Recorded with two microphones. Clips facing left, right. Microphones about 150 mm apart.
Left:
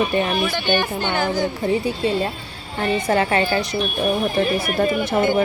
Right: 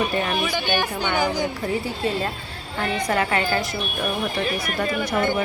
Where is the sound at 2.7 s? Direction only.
30° left (ahead or behind).